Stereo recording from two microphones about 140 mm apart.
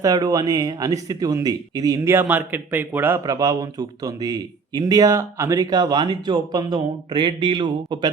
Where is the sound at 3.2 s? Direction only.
25° right (ahead or behind).